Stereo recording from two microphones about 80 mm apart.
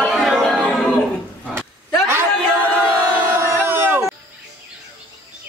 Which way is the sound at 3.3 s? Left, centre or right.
Right.